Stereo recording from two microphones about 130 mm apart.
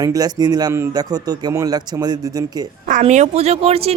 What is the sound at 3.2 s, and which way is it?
Speech, 50° right (ahead or behind).